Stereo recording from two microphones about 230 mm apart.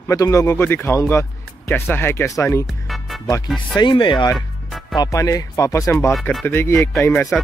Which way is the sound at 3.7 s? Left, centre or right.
Centre.